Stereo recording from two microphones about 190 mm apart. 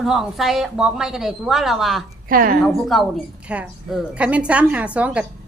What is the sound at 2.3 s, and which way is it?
Speech, 50° right (ahead or behind).